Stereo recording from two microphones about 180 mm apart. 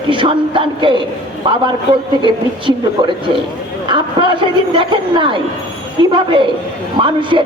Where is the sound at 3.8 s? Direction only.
25° right (ahead or behind).